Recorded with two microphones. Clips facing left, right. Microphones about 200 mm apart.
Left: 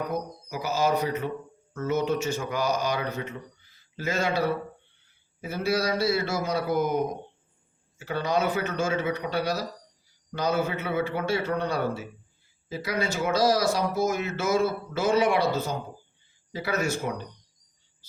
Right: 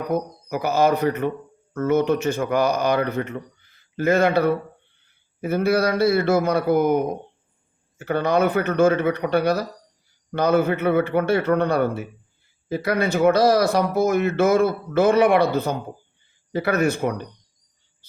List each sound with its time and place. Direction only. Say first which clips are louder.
0.1 s speech: right 7 dB; 60° right (ahead or behind)